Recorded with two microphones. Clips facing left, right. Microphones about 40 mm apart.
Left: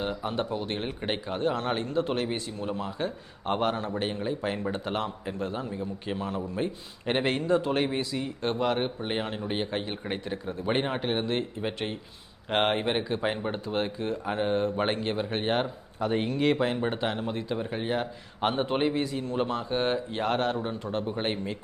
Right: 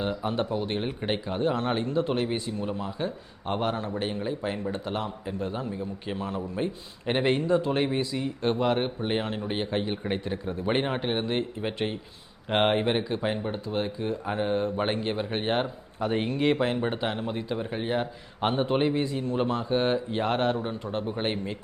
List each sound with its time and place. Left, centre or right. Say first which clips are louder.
0.0 s a man's voice: right 2 dB; centre
5.4 s a man's voice: right 1 dB; centre
14.0 s a man's voice: even; centre